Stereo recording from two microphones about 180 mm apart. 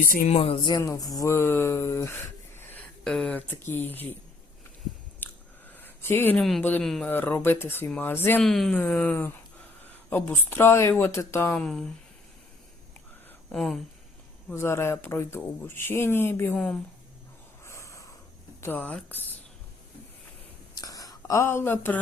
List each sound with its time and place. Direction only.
0.0 s speech: 45° left (ahead or behind)
0.3 s speech: 30° left (ahead or behind); by 4.0 s 10° left (ahead or behind)
5.2 s chewing: 10° left (ahead or behind)
5.7 s a sound: 10° left (ahead or behind)
6.4 s speech: 5° left (ahead or behind)
13.5 s speech: centre (ahead or behind)
14.5 s speech: 15° left (ahead or behind)
17.7 s snort: 15° left (ahead or behind)
18.6 s speech: 10° left (ahead or behind)
20.7 s a sound: 20° left (ahead or behind)